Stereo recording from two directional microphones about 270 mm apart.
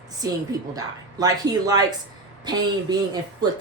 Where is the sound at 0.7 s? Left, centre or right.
Centre.